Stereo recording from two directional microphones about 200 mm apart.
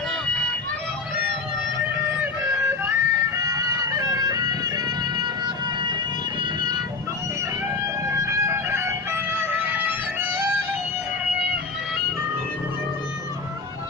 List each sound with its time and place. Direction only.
2.1 s music: 10° right (ahead or behind)
6.4 s vehicle: 20° right (ahead or behind)
8.0 s music: 15° right (ahead or behind)